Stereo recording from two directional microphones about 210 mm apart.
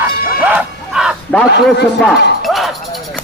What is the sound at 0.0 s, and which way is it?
Music, 5° right (ahead or behind).